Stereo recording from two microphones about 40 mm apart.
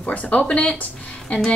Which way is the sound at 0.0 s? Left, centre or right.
Left.